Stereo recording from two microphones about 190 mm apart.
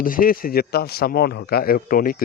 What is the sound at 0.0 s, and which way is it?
Speech, 50° left (ahead or behind).